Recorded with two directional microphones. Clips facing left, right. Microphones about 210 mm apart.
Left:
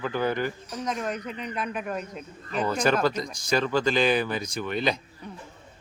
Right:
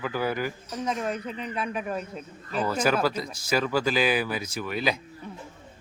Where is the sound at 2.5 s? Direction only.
5° right (ahead or behind).